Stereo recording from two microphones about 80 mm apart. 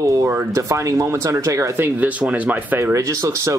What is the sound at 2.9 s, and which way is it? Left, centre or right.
Speech, right.